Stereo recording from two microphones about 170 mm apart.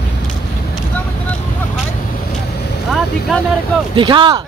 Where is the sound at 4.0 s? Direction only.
30° right (ahead or behind).